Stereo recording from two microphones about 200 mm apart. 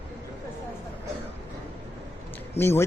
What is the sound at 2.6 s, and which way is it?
Speech, 10° left (ahead or behind).